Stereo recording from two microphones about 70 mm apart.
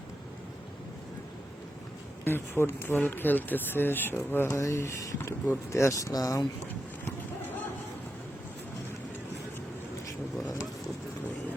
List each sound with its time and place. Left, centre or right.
2.2 s speech: left
4.6 s speech: left
5.9 s speech: left